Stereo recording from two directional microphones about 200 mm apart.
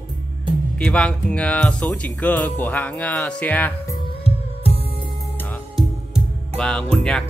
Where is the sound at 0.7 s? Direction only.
5° left (ahead or behind).